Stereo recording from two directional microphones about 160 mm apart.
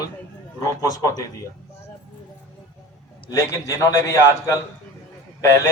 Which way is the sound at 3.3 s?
20° left (ahead or behind).